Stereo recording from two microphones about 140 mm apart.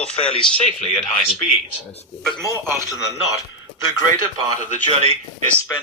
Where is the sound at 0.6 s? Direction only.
50° left (ahead or behind).